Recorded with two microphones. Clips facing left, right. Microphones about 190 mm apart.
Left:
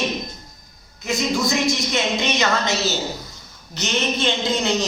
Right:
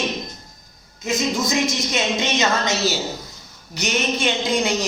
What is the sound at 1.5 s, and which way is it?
A woman's voice, 15° right (ahead or behind).